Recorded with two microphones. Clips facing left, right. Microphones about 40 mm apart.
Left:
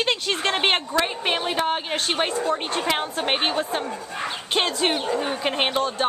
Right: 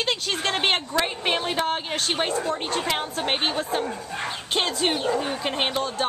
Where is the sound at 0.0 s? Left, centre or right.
Centre.